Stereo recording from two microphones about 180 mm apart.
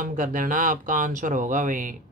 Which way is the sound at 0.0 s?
45° right (ahead or behind).